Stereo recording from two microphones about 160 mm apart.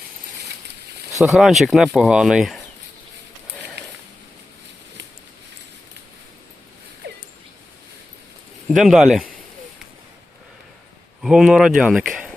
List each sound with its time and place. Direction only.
1.2 s speech: centre (ahead or behind)
7.0 s a sound: 90° right
8.7 s speech: centre (ahead or behind)
11.2 s speech: 5° right (ahead or behind)